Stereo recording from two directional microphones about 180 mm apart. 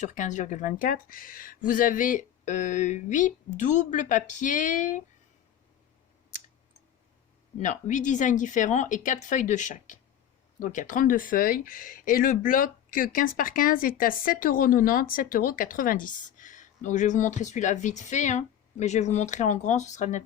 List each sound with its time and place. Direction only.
0.0 s speech: 45° left (ahead or behind)
7.6 s speech: 45° left (ahead or behind)